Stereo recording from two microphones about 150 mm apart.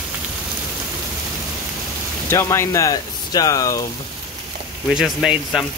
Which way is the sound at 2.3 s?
20° left (ahead or behind).